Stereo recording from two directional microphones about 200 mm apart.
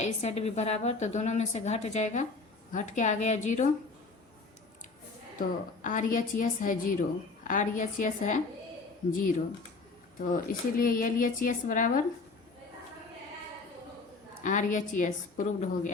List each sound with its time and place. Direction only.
0.0 s a woman's voice: 35° left (ahead or behind)
5.4 s a woman's voice: 40° left (ahead or behind)
10.2 s speech: 45° left (ahead or behind)
14.4 s a woman's voice: 40° left (ahead or behind)